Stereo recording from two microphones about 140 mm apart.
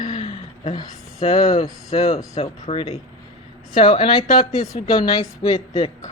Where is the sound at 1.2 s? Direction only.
30° left (ahead or behind).